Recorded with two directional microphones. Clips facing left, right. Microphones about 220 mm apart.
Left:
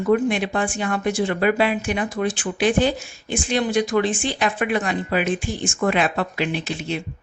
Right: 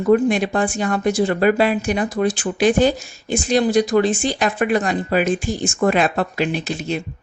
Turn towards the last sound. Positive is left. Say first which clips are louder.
# right 3 dB
turn(degrees=-40)  # may be behind; listen again after turning